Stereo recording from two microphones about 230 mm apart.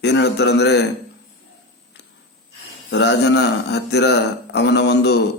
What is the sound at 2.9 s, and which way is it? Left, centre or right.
A man's voice, left.